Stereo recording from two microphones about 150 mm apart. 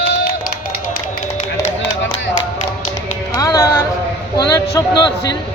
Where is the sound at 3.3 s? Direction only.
20° left (ahead or behind).